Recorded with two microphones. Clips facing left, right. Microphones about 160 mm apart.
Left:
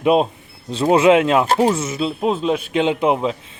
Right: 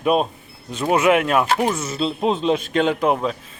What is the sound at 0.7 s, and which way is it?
Speech, 30° left (ahead or behind).